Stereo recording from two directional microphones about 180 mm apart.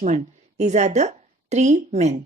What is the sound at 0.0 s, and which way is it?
A woman's voice, 40° right (ahead or behind).